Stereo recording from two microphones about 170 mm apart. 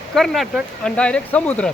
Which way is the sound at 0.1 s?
Centre (ahead or behind).